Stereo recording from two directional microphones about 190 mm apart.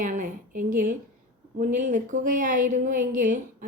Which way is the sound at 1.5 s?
45° right (ahead or behind).